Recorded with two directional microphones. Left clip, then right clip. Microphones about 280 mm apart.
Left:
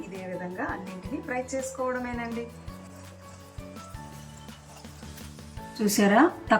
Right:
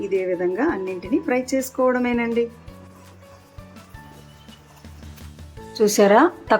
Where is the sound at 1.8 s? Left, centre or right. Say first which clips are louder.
Right 13 dB; right.